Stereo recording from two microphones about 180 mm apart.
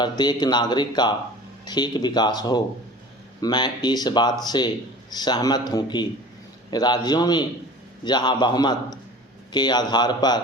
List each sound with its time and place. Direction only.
0.0 s speech: 25° left (ahead or behind)